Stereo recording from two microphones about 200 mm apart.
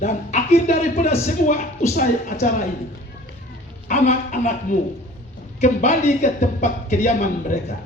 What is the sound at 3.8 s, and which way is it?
A man's voice, 35° left (ahead or behind).